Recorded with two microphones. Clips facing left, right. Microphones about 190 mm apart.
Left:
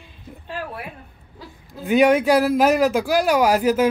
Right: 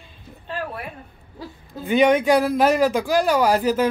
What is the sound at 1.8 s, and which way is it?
Speech, 5° left (ahead or behind).